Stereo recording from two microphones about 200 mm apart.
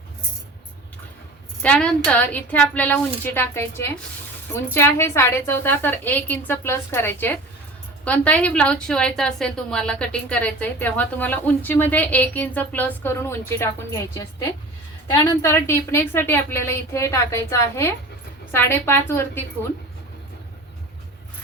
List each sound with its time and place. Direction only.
1.6 s a woman's voice: 5° left (ahead or behind)